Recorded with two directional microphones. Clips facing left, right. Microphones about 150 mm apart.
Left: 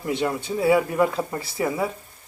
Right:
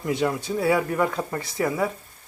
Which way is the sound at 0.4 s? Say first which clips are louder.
Left 6 dB; centre (ahead or behind).